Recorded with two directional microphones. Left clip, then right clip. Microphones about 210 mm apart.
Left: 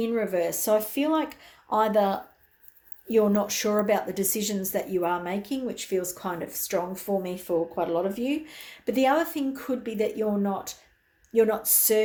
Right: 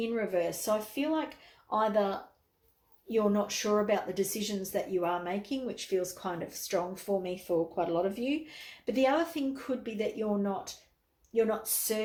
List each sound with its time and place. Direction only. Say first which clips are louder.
0.0 s speech: left 5 dB; 20° left (ahead or behind)
11.3 s speech: left 7 dB; 40° left (ahead or behind)